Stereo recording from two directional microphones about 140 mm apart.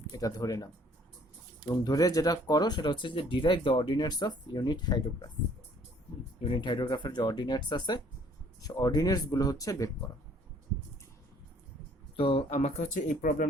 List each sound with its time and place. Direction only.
0.1 s speech: 25° left (ahead or behind)
6.4 s speech: 35° left (ahead or behind)
12.1 s speech: 40° left (ahead or behind); by 13.5 s 70° left (ahead or behind)